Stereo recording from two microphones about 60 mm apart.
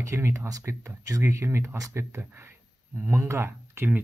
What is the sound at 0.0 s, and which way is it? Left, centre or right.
Speech, right.